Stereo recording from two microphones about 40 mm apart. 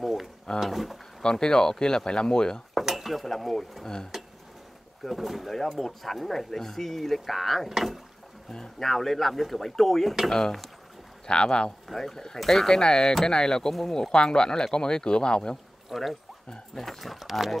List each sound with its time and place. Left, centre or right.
0.0 s drawer open or close: centre
0.6 s speech: centre
1.2 s speech: centre
2.7 s dishes: centre
3.1 s speech: centre
5.1 s speech: centre
8.5 s speech: centre
11.2 s speech: left
11.9 s speech: centre
13.7 s speech: centre
14.1 s speech: left
15.9 s speech: centre